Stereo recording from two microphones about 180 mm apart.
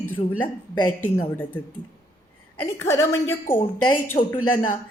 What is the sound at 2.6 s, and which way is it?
Speech, 15° left (ahead or behind).